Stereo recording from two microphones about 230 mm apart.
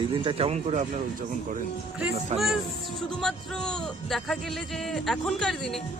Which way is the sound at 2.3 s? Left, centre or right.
Right.